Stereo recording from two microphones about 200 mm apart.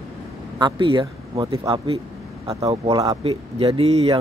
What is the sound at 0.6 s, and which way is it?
Speech, 25° right (ahead or behind).